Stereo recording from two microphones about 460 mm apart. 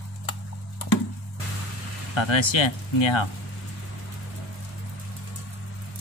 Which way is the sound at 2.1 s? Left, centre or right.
Left.